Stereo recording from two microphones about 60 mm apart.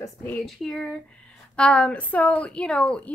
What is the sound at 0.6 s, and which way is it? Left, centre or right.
Speech, centre.